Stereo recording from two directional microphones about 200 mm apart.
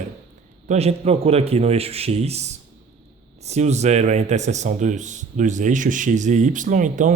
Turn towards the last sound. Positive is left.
turn(degrees=-40)  # may be behind; listen again after turning